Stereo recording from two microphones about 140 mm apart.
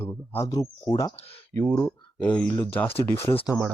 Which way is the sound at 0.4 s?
30° left (ahead or behind).